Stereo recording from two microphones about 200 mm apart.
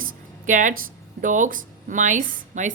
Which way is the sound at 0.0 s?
40° right (ahead or behind).